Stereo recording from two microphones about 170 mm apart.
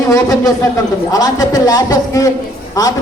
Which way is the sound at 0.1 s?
20° left (ahead or behind).